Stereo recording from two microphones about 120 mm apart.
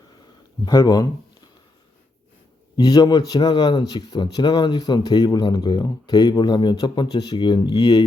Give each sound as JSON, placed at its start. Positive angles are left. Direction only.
{"t": 0.6, "sound": "speech", "side_deg": 35}
{"t": 2.7, "sound": "speech", "side_deg": 35}